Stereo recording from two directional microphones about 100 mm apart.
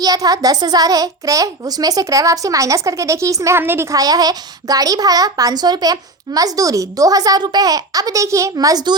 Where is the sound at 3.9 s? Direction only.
40° right (ahead or behind).